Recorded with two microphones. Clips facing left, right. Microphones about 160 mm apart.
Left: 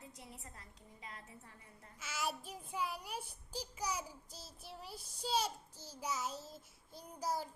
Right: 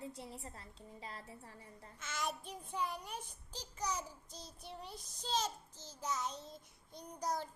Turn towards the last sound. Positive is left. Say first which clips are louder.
# even
turn(degrees=5)  # may be behind; listen again after turning